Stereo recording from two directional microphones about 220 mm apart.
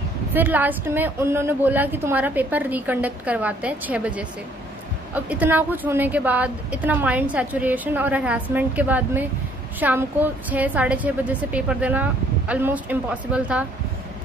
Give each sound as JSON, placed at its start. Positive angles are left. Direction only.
{"t": 0.3, "sound": "a woman's voice", "side_deg": -10}